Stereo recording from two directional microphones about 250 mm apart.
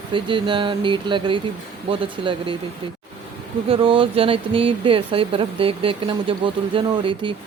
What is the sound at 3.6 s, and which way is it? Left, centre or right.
Speech, right.